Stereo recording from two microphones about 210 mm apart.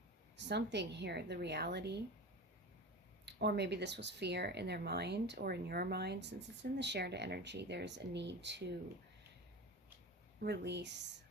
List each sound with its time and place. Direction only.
0.3 s speech: 55° right (ahead or behind)
3.2 s speech: 55° right (ahead or behind)
10.4 s speech: 50° right (ahead or behind)